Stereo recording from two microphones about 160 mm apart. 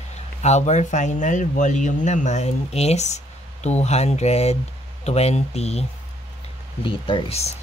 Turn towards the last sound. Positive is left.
turn(degrees=40)  # may be behind; listen again after turning